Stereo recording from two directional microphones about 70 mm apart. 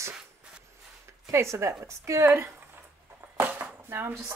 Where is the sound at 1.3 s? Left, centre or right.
Right.